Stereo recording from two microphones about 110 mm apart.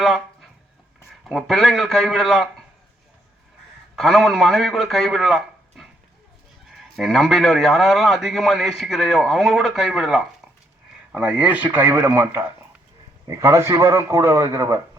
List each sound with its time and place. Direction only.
1.2 s a man's voice: centre (ahead or behind)
3.9 s a man's voice: centre (ahead or behind)
6.9 s a man's voice: centre (ahead or behind); by 14.8 s 25° right (ahead or behind)